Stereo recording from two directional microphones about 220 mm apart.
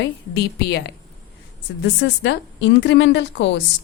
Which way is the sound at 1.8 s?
55° left (ahead or behind).